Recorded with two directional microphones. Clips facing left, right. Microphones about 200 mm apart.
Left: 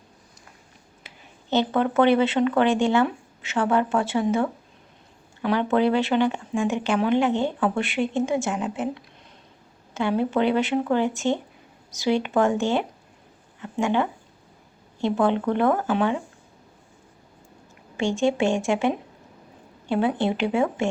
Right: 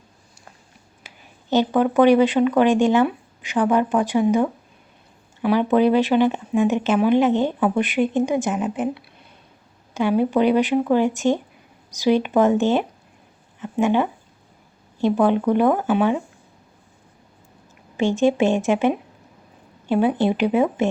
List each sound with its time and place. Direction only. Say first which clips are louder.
1.5 s speech: right 4 dB; 15° right (ahead or behind)
17.9 s speech: right 4 dB; 20° right (ahead or behind)